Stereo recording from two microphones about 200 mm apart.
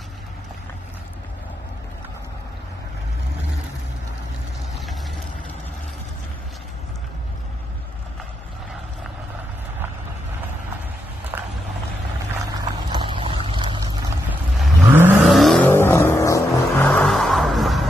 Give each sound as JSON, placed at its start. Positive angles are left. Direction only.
{"t": 11.3, "sound": "a sound", "side_deg": -10}
{"t": 12.9, "sound": "vehicle", "side_deg": -25}
{"t": 14.6, "sound": "vehicle", "side_deg": -10}